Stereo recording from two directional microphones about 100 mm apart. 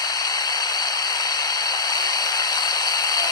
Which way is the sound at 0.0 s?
40° left (ahead or behind).